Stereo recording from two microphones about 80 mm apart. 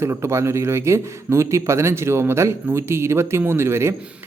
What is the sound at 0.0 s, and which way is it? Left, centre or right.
A man's voice, right.